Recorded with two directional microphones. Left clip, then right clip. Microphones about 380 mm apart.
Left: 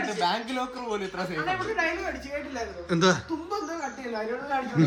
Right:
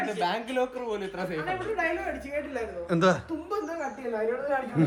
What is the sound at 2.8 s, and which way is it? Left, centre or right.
Speech, centre.